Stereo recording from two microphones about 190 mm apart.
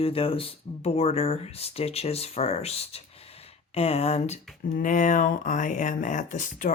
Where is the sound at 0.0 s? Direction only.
30° left (ahead or behind).